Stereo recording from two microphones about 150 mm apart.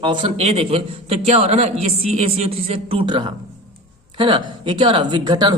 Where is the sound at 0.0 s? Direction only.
35° right (ahead or behind).